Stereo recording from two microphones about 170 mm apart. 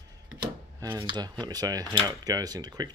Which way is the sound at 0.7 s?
15° right (ahead or behind).